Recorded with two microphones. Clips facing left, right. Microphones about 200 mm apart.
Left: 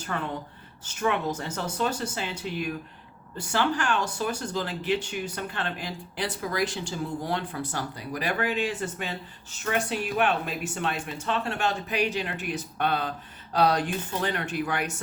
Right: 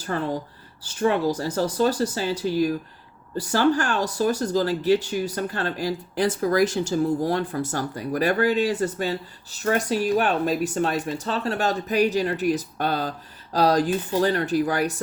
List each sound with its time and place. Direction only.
0.0 s speech: 35° right (ahead or behind)